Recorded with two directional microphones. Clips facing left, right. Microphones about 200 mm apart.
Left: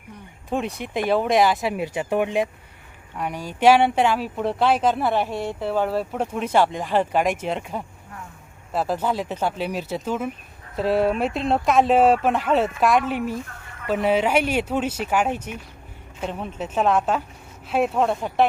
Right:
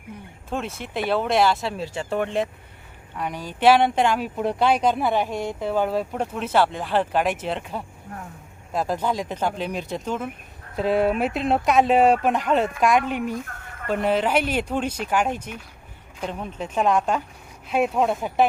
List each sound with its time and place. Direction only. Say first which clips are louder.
0.5 s speech: left 3 dB; centre (ahead or behind)
1.5 s speech: left 1 dB; 15° left (ahead or behind); by 18.4 s centre (ahead or behind)